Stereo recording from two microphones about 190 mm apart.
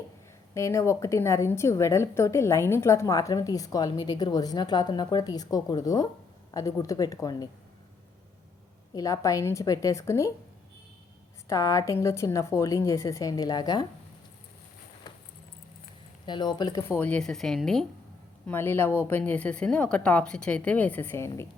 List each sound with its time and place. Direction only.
0.5 s a woman's voice: 15° left (ahead or behind)
9.0 s a woman's voice: 15° left (ahead or behind)
11.4 s a woman's voice: 20° left (ahead or behind)
16.2 s a woman's voice: 25° left (ahead or behind); by 17.8 s centre (ahead or behind)
18.4 s a woman's voice: 10° left (ahead or behind)